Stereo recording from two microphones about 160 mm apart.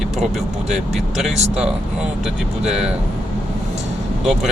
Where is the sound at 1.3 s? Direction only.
40° right (ahead or behind).